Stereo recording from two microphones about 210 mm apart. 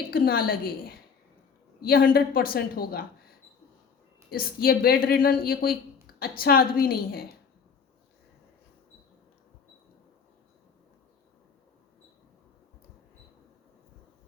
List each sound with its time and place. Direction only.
0.1 s a woman's voice: 45° left (ahead or behind)
4.3 s a woman's voice: 45° left (ahead or behind)